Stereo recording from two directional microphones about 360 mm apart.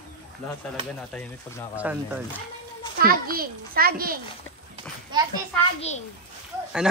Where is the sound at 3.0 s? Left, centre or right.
Right.